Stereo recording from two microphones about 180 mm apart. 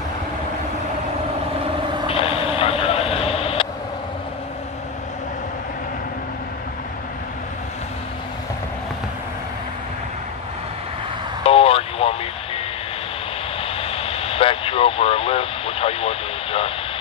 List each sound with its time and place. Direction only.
2.0 s vehicle: 30° left (ahead or behind)
11.4 s vehicle: 30° left (ahead or behind)
13.6 s radio: 30° left (ahead or behind)